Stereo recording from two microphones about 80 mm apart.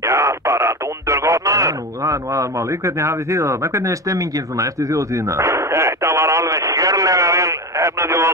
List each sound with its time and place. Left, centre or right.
0.1 s radio: right
3.0 s speech: right